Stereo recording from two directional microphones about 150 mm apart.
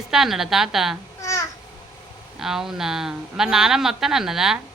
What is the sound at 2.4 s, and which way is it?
Speech, 5° right (ahead or behind).